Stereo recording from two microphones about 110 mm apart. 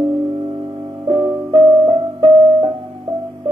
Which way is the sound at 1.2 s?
5° right (ahead or behind).